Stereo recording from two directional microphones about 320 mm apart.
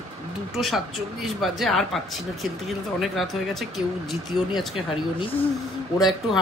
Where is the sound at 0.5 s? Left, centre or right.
Centre.